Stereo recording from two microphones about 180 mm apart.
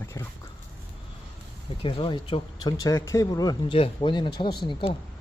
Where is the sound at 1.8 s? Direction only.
30° left (ahead or behind).